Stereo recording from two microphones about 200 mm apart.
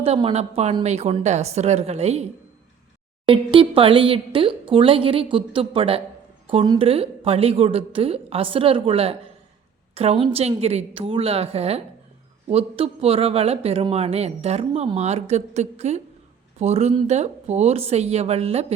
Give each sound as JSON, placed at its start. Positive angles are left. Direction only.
{"t": 0.0, "sound": "speech", "side_deg": -25}
{"t": 3.2, "sound": "speech", "side_deg": -25}